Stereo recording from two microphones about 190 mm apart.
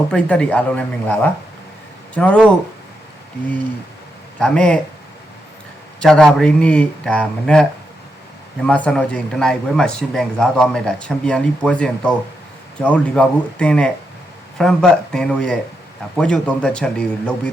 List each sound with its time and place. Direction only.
0.1 s speech: 5° left (ahead or behind)
4.4 s a man's voice: 5° left (ahead or behind)
6.0 s a man's voice: centre (ahead or behind)